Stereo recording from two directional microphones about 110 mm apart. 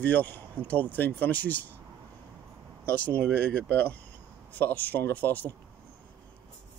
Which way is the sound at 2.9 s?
15° left (ahead or behind).